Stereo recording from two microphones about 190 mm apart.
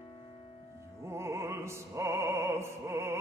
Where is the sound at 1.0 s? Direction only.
15° right (ahead or behind).